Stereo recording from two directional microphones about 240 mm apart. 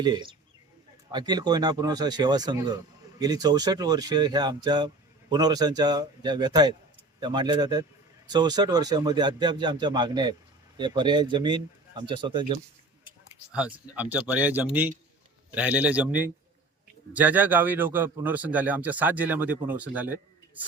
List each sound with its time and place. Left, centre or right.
0.0 s speech: centre
13.5 s speech: centre